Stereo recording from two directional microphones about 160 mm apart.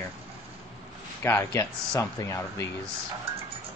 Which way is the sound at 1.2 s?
15° left (ahead or behind).